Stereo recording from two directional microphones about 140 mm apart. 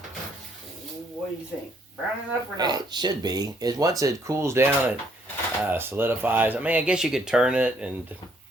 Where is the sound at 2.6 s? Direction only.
30° right (ahead or behind).